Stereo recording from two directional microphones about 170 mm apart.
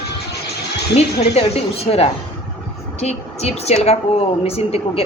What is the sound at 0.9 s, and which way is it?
A woman's voice, 35° left (ahead or behind).